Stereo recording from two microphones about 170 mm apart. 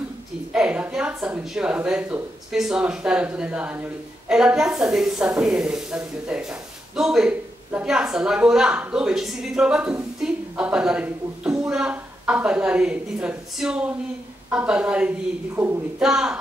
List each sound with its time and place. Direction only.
0.5 s a woman's voice: 5° right (ahead or behind)